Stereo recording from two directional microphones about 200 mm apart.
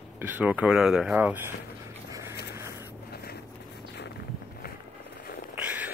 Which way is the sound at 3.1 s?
50° left (ahead or behind).